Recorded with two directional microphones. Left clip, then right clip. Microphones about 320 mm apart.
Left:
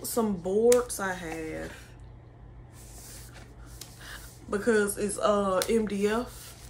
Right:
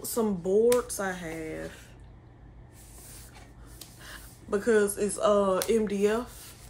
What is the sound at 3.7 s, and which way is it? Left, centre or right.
Speech, centre.